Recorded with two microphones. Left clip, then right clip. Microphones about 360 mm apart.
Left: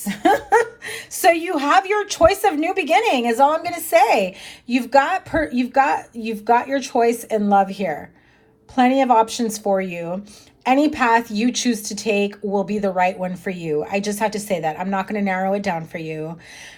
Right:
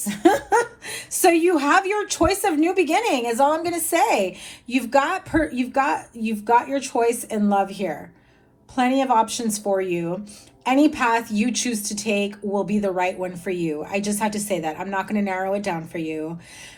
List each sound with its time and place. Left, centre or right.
0.0 s laughter: left
0.9 s a woman's voice: centre